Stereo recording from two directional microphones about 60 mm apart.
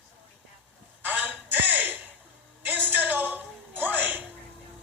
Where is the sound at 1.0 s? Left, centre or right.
Right.